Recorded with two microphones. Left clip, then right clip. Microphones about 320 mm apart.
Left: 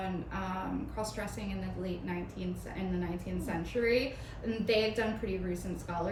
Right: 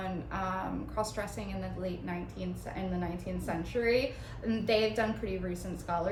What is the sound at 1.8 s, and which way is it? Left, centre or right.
A woman's voice, centre.